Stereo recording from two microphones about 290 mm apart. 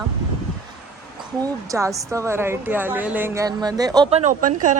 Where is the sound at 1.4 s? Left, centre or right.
Centre.